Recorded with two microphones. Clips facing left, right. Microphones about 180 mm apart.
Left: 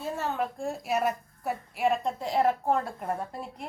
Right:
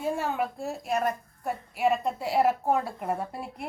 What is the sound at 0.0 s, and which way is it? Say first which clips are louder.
A woman's voice: right 2 dB; 10° right (ahead or behind).